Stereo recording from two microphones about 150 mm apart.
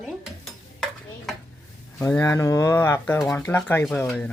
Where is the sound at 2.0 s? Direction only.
20° left (ahead or behind).